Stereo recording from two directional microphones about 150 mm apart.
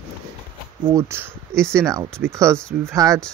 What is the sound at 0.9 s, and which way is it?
Speech, 20° right (ahead or behind).